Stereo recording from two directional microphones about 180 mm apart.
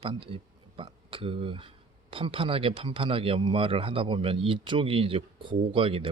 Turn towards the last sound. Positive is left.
turn(degrees=-30)  # may be behind; listen again after turning